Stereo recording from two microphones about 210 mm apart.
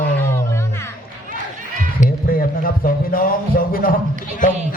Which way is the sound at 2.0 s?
40° left (ahead or behind).